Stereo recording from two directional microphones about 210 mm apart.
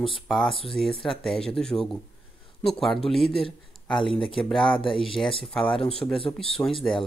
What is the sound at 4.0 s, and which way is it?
Speech, 25° left (ahead or behind).